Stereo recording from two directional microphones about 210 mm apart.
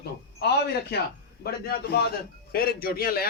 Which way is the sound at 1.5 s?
50° left (ahead or behind).